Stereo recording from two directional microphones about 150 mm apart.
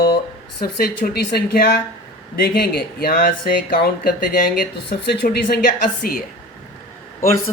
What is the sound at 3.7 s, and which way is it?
Speech, 85° left.